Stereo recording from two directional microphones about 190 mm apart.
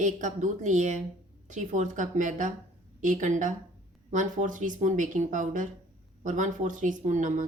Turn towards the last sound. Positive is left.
turn(degrees=-40)  # may be behind; listen again after turning